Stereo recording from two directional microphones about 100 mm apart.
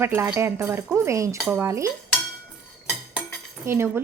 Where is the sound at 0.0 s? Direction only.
25° right (ahead or behind).